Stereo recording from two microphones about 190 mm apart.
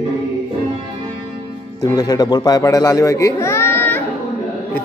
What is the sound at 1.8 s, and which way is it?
A man's voice, 20° left (ahead or behind).